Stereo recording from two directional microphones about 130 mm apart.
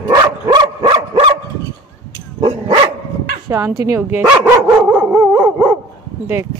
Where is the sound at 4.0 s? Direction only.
10° right (ahead or behind).